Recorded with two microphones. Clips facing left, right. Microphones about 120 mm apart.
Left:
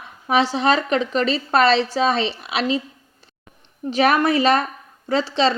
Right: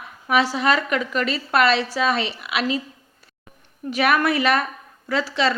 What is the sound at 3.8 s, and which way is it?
A woman's voice, 25° left (ahead or behind).